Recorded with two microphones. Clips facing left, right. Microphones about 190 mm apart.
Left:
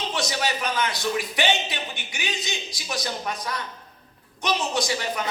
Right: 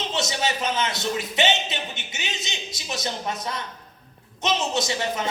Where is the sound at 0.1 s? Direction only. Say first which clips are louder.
Right 1 dB; 25° right (ahead or behind).